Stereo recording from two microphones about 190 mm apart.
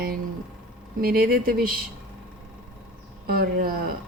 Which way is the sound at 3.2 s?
55° right (ahead or behind).